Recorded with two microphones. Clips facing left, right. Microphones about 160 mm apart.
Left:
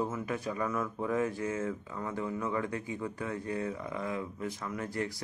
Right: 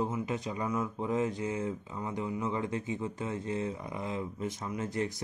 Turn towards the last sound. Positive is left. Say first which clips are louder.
# right 2 dB
turn(degrees=-20)  # may be behind; listen again after turning